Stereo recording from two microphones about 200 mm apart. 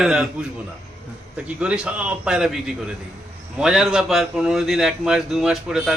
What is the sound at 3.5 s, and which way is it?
Speech, 5° right (ahead or behind).